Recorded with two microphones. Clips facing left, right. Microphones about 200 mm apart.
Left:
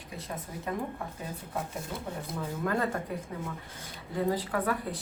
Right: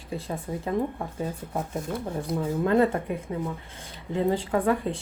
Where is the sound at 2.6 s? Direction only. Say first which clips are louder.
Right 8 dB; 25° right (ahead or behind).